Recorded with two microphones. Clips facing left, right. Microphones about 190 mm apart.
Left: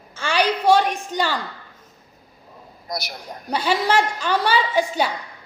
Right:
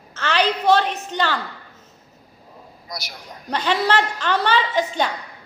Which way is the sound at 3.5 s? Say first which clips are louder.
Even; 10° left (ahead or behind).